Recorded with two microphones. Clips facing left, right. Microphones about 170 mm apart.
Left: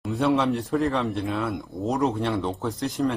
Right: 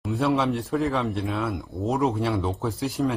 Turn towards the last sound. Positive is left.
turn(degrees=-5)  # may be behind; listen again after turning